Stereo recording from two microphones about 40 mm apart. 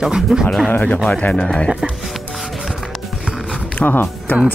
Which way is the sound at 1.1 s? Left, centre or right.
Left.